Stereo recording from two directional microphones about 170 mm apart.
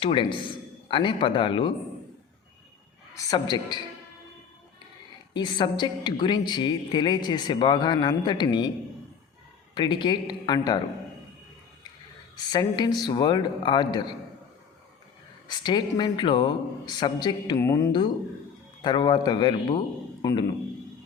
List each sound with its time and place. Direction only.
0.0 s a man's voice: 30° left (ahead or behind)
3.2 s a woman's voice: 20° left (ahead or behind)
5.3 s a woman's voice: 25° left (ahead or behind)
9.7 s a woman's voice: 25° left (ahead or behind)
12.4 s a woman's voice: 25° left (ahead or behind)
15.4 s a woman's voice: 25° left (ahead or behind)